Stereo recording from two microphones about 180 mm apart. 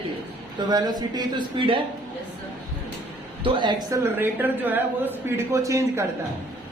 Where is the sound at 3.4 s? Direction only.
25° right (ahead or behind).